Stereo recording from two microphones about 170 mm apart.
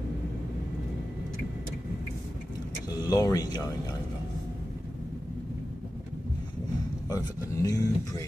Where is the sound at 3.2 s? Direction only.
20° left (ahead or behind).